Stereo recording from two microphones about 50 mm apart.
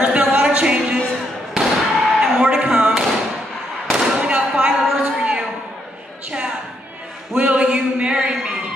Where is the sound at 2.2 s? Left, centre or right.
Centre.